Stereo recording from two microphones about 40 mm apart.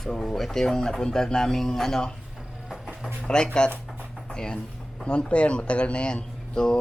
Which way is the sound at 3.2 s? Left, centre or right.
Left.